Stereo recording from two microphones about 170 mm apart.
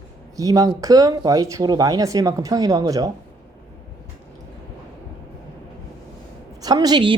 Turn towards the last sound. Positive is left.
turn(degrees=-25)  # may be behind; listen again after turning